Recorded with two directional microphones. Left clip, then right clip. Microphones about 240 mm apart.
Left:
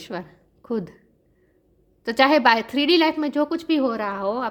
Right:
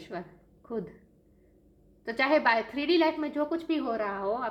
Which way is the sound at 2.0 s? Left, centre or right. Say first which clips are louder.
Left 8 dB; left.